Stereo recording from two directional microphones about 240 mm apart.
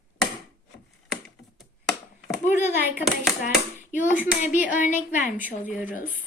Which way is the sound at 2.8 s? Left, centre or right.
Centre.